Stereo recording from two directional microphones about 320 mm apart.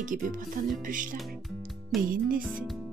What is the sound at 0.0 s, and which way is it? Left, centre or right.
Speech, right.